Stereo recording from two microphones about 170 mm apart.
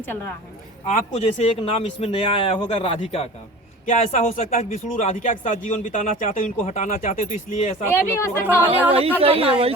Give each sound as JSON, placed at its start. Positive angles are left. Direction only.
{"t": 0.9, "sound": "speech", "side_deg": 40}
{"t": 8.1, "sound": "speech", "side_deg": 15}
{"t": 8.9, "sound": "speech", "side_deg": -35}